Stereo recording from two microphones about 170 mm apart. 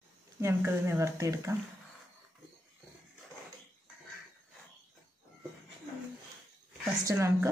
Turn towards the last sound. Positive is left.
turn(degrees=-15)  # may be behind; listen again after turning